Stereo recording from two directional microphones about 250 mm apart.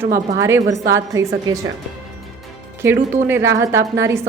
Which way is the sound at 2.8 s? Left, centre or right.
Centre.